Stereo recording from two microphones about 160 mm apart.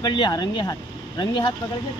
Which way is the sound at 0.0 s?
25° left (ahead or behind).